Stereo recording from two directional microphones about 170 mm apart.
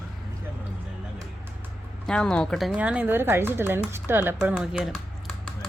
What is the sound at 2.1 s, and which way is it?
Speech, 5° left (ahead or behind).